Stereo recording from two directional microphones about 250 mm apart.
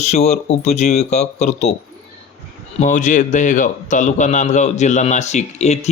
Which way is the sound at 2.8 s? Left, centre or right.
Left.